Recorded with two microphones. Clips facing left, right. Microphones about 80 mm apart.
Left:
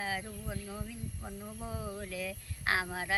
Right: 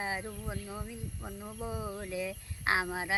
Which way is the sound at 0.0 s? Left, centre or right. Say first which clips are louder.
Right 1 dB; right.